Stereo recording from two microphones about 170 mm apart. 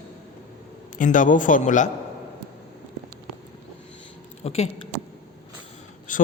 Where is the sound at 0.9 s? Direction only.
50° left (ahead or behind).